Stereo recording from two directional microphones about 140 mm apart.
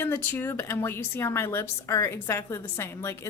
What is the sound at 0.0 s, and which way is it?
Speech, 15° left (ahead or behind).